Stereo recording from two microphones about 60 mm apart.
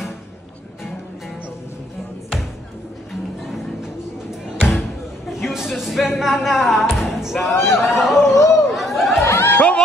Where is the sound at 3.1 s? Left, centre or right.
Centre.